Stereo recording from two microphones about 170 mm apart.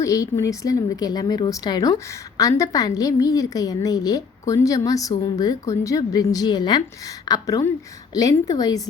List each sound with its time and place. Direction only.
0.0 s speech: 20° left (ahead or behind)